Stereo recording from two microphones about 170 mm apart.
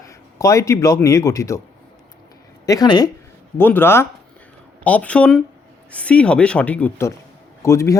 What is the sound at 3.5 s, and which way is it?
Speech, 10° left (ahead or behind).